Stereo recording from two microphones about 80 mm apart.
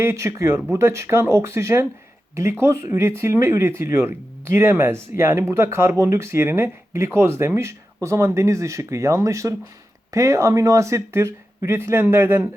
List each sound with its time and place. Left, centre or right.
0.0 s speech: right